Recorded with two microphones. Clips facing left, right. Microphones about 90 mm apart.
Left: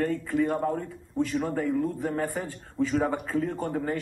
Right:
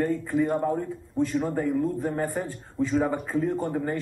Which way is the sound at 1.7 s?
5° right (ahead or behind).